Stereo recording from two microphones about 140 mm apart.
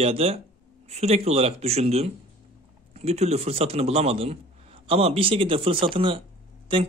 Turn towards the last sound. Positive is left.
turn(degrees=-35)  # may be behind; listen again after turning